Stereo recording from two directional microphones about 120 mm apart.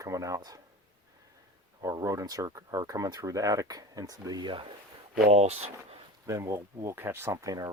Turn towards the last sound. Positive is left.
turn(degrees=-30)  # may be behind; listen again after turning